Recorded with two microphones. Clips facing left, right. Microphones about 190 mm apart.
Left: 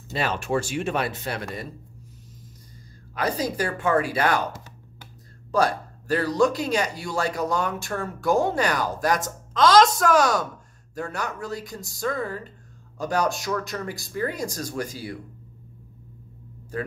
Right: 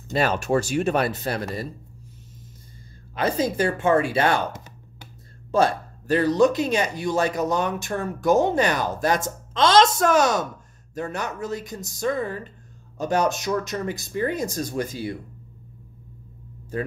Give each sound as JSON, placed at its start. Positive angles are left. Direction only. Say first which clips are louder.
{"t": 0.1, "sound": "speech", "louder": "right 4 dB", "side_deg": -45}
{"t": 3.2, "sound": "speech", "louder": "right 3 dB", "side_deg": -25}